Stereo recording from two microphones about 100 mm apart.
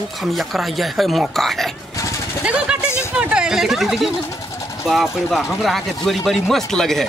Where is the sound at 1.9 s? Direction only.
30° left (ahead or behind).